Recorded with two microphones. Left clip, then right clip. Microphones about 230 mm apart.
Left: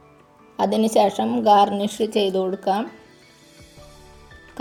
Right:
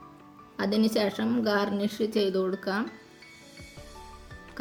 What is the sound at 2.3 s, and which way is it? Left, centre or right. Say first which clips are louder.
Speech: left 7 dB; centre.